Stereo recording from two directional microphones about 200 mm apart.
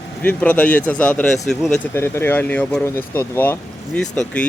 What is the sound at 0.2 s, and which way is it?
Speech, 10° left (ahead or behind).